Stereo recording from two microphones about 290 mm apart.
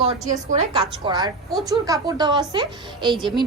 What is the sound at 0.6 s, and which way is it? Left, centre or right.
A woman's voice, centre.